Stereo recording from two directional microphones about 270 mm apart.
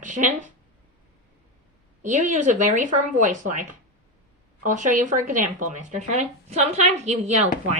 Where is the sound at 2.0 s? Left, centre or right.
Right.